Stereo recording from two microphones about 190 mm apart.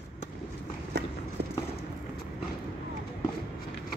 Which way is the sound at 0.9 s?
65° right (ahead or behind).